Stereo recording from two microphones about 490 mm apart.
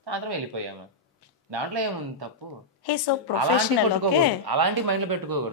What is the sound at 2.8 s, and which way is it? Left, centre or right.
Speech, left.